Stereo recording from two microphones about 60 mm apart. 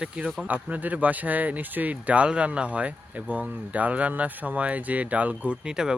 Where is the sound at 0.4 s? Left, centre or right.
Right.